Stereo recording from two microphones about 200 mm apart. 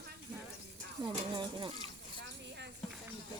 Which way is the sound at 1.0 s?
25° right (ahead or behind).